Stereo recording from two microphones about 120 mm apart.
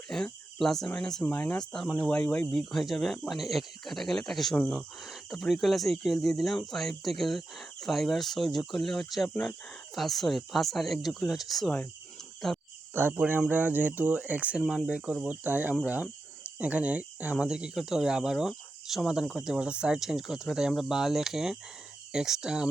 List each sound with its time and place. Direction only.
0.1 s speech: 5° left (ahead or behind)
12.9 s speech: 20° right (ahead or behind)
14.6 s speech: 5° left (ahead or behind)
14.8 s speech: 10° right (ahead or behind)